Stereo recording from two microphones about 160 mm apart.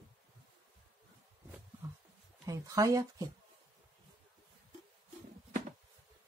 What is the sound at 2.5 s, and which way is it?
Speech, 20° right (ahead or behind).